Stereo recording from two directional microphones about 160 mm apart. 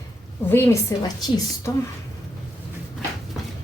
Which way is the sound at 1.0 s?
25° left (ahead or behind).